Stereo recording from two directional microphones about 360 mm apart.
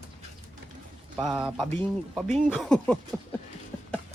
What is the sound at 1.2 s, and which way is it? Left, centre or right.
Speech, centre.